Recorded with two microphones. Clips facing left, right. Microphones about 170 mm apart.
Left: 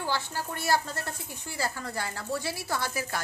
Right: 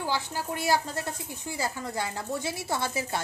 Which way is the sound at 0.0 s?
15° right (ahead or behind).